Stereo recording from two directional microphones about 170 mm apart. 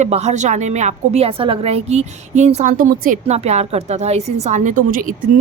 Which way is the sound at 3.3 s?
40° right (ahead or behind).